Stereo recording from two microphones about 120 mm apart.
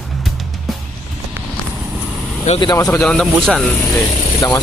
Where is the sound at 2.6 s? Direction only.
35° left (ahead or behind).